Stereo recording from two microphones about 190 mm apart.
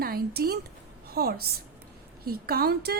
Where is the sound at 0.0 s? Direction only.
55° right (ahead or behind).